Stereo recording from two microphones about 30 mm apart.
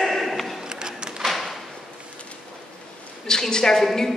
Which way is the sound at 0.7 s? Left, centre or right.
Right.